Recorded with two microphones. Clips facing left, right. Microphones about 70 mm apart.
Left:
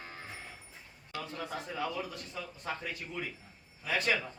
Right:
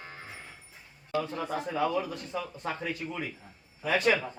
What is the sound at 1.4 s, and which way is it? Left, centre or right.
Speech, right.